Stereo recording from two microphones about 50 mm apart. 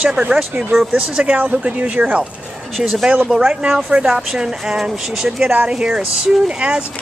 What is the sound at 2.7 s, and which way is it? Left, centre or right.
Speech, centre.